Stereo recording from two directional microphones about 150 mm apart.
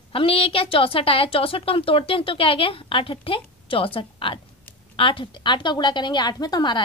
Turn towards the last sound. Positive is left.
turn(degrees=30)  # may be behind; listen again after turning